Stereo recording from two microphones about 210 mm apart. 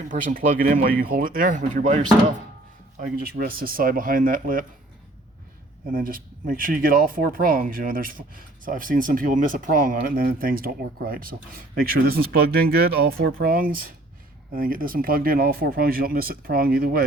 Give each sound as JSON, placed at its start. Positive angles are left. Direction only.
{"t": 0.1, "sound": "speech", "side_deg": -40}
{"t": 5.9, "sound": "speech", "side_deg": -40}